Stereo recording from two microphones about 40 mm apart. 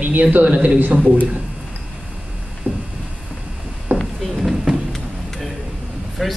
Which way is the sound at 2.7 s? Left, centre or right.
Right.